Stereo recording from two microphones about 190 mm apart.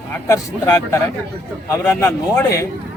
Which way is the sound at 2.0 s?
15° left (ahead or behind).